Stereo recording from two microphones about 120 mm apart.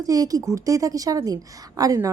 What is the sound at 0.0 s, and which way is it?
A woman's voice, 30° right (ahead or behind).